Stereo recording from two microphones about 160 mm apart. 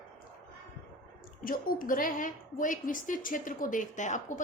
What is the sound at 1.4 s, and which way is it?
A woman's voice, 60° left (ahead or behind).